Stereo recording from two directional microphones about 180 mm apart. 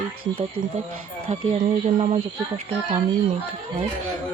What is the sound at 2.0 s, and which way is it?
Speech, 35° right (ahead or behind).